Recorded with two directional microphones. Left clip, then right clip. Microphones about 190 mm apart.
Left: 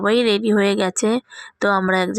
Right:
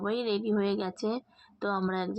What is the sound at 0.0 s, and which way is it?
Speech, 25° left (ahead or behind).